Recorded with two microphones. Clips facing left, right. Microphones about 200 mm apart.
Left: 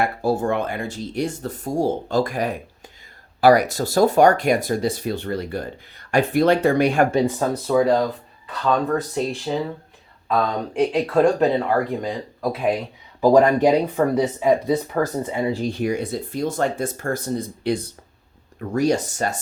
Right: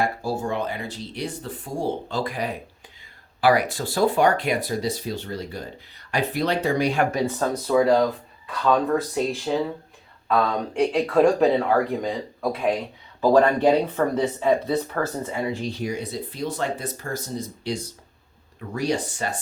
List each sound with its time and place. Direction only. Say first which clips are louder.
0.0 s speech: left 4 dB; 60° left (ahead or behind)
7.3 s speech: left 2 dB; 10° left (ahead or behind)
15.6 s speech: left 5 dB; 55° left (ahead or behind)
18.7 s speech: left 5 dB; 45° left (ahead or behind)